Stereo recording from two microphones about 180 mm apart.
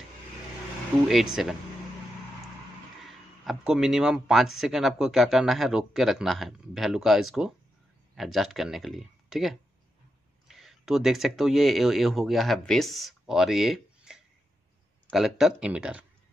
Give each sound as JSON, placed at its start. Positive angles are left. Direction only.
{"t": 1.0, "sound": "speech", "side_deg": 0}
{"t": 3.0, "sound": "speech", "side_deg": 0}